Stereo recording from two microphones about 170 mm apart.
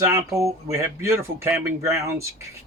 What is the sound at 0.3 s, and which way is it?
Speech, 20° right (ahead or behind).